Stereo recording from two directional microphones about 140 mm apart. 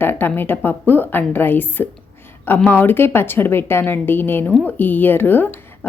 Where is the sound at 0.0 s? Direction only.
15° left (ahead or behind).